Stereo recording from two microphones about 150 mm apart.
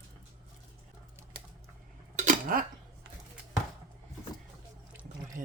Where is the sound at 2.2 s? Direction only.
65° right (ahead or behind).